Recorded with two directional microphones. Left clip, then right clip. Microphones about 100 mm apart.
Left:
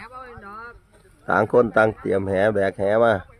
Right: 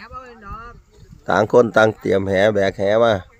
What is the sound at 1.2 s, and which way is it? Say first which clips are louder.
Speech: right 4 dB; 25° right (ahead or behind).